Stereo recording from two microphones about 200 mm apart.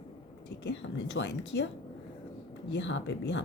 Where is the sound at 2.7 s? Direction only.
65° left (ahead or behind).